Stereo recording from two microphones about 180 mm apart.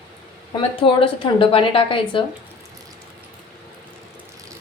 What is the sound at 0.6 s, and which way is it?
A woman's voice, 30° left (ahead or behind).